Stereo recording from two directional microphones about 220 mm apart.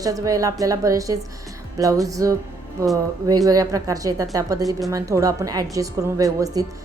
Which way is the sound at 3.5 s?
15° right (ahead or behind).